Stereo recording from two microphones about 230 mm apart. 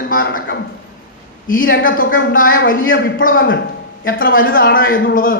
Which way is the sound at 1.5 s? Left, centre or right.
Left.